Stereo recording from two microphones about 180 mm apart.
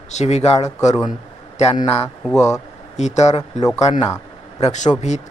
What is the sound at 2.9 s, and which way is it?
Speech, 40° left (ahead or behind).